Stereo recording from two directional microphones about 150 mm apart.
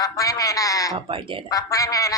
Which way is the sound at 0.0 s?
25° left (ahead or behind).